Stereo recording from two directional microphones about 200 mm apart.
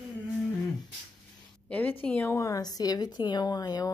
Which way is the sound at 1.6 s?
10° left (ahead or behind).